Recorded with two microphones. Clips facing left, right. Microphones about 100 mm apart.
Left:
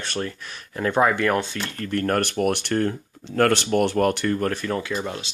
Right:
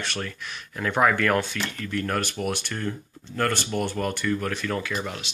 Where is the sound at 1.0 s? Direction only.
20° left (ahead or behind).